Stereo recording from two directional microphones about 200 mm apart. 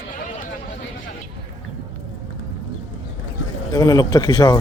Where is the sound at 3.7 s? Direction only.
20° left (ahead or behind).